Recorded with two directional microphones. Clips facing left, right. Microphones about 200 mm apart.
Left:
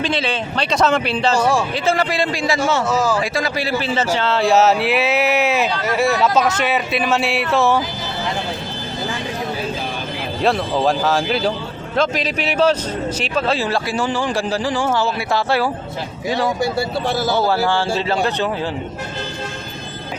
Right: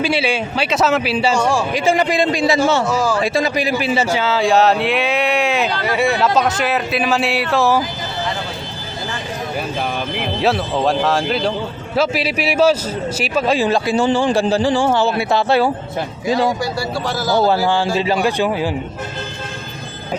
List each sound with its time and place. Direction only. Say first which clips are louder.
0.0 s speech: right 3 dB; 10° right (ahead or behind)
1.4 s a man's voice: even; centre (ahead or behind)
1.7 s speech: right 3 dB; 15° right (ahead or behind)
2.8 s a man's voice: even; 5° left (ahead or behind)
3.2 s a man's voice: right 3 dB; 20° right (ahead or behind); by 7.8 s centre (ahead or behind)
10.4 s a man's voice: even; centre (ahead or behind); by 15.7 s 25° right (ahead or behind)
16.6 s speech: left 2 dB; 25° left (ahead or behind)
17.4 s speech: right 2 dB; 20° right (ahead or behind)